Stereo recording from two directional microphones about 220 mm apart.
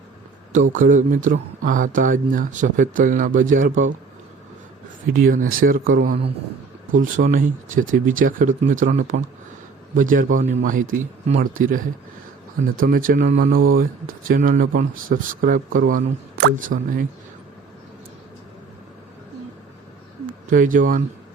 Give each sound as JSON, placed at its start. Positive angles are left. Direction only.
{"t": 0.7, "sound": "speech", "side_deg": -35}
{"t": 5.1, "sound": "speech", "side_deg": -40}
{"t": 20.2, "sound": "speech", "side_deg": -35}